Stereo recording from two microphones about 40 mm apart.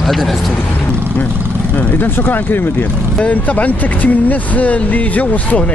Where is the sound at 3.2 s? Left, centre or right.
Left.